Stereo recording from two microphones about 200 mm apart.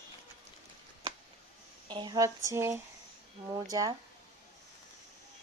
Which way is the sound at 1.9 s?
20° right (ahead or behind).